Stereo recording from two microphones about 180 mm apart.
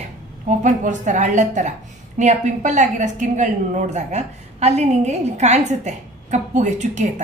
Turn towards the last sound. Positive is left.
turn(degrees=-40)  # may be behind; listen again after turning